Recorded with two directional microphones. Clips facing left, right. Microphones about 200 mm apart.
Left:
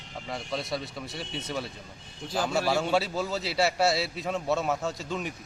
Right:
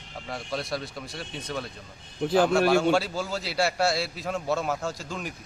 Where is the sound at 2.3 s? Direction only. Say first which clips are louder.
Right 8 dB; 65° right (ahead or behind).